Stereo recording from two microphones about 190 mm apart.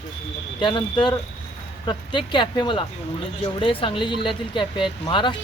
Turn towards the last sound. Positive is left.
turn(degrees=25)  # may be behind; listen again after turning